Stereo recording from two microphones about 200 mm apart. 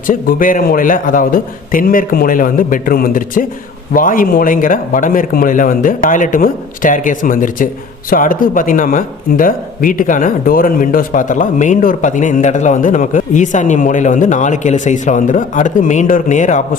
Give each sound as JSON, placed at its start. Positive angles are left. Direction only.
{"t": 0.1, "sound": "a man's voice", "side_deg": 45}